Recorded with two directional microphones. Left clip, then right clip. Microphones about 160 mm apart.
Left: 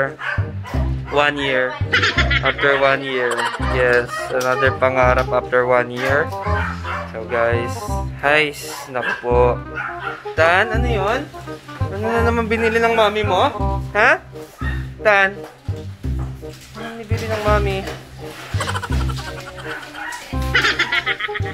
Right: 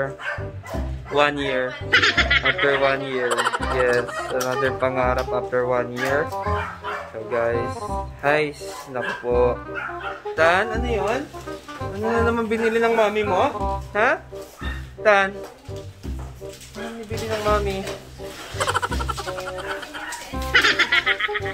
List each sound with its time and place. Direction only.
1.4 s speech: centre (ahead or behind)
10.3 s speech: 15° left (ahead or behind)
10.8 s speech: centre (ahead or behind)
15.0 s speech: 15° left (ahead or behind)
17.5 s speech: 15° left (ahead or behind)
18.6 s music: centre (ahead or behind)
20.3 s music: centre (ahead or behind)